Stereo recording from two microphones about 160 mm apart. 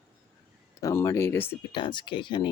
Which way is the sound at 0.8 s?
20° left (ahead or behind).